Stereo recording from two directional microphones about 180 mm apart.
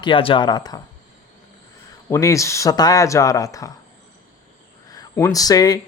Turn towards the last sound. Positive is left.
turn(degrees=20)  # may be behind; listen again after turning